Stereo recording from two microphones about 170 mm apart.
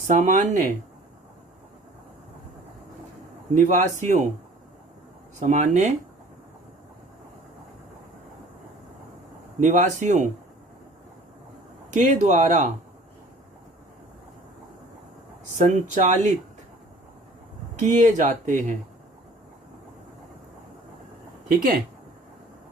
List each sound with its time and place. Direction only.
0.1 s speech: 50° right (ahead or behind)
3.5 s speech: 45° right (ahead or behind)
5.4 s speech: 45° right (ahead or behind)
9.6 s speech: 45° right (ahead or behind)
11.9 s speech: 45° right (ahead or behind)
15.5 s speech: 45° right (ahead or behind)
17.7 s speech: 45° right (ahead or behind)